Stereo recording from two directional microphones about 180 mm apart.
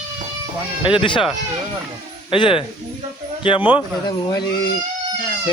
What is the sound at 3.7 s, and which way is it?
Speech, 25° left (ahead or behind).